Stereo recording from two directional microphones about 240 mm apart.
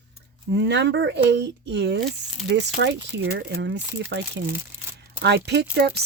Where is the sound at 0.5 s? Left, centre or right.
Right.